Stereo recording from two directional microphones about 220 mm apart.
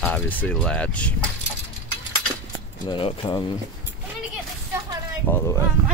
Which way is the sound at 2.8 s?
25° left (ahead or behind).